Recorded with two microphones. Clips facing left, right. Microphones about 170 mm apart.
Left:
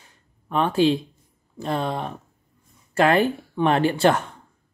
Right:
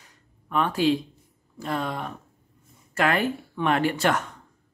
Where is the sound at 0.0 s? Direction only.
30° left (ahead or behind).